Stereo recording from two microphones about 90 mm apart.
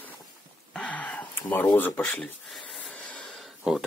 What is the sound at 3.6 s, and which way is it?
Speech, 10° right (ahead or behind).